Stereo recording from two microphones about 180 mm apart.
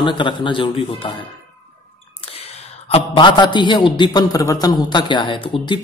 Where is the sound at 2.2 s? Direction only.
35° left (ahead or behind).